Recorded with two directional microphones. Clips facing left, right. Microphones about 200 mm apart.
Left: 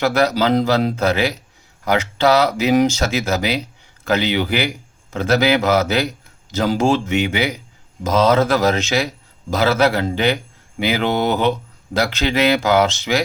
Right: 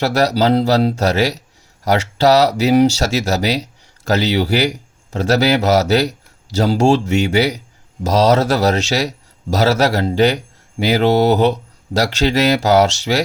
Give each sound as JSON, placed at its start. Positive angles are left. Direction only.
{"t": 0.0, "sound": "a man's voice", "side_deg": -40}